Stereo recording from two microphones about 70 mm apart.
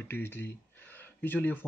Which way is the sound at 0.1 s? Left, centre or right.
Left.